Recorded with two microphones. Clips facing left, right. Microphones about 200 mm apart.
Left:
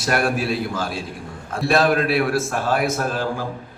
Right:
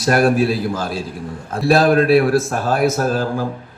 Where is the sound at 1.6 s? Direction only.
30° right (ahead or behind).